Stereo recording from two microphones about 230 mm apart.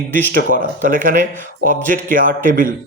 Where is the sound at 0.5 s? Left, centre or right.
Right.